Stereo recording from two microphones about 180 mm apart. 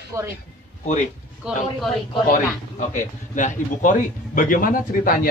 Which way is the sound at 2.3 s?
45° left (ahead or behind).